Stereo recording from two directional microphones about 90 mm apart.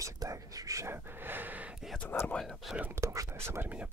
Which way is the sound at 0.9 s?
25° right (ahead or behind).